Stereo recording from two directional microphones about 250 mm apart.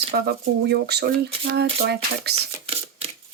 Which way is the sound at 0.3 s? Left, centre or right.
Right.